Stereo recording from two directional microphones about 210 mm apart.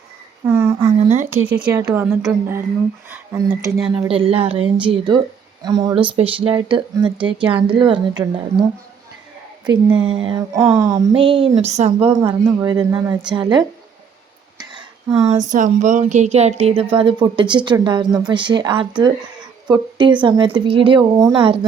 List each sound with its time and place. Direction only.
0.4 s a sound: 10° right (ahead or behind)
0.9 s speech: 35° right (ahead or behind)
1.5 s speech: 5° right (ahead or behind)
9.6 s speech: 25° right (ahead or behind)
11.1 s speech: 25° right (ahead or behind)
12.2 s speech: 15° right (ahead or behind)
14.6 s a sound: 20° right (ahead or behind)
15.4 s speech: 35° right (ahead or behind)